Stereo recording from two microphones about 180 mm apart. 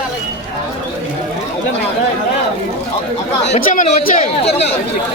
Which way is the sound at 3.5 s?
45° left (ahead or behind).